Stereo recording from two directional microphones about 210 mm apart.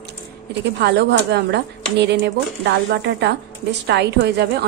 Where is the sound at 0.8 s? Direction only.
55° right (ahead or behind).